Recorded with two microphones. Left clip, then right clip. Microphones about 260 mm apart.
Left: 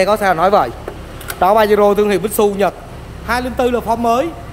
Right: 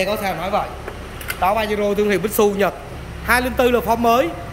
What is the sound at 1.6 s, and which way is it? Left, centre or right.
Speech, centre.